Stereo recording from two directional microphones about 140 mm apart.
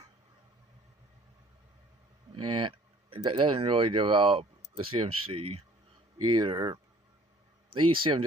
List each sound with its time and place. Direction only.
2.3 s speech: 35° right (ahead or behind)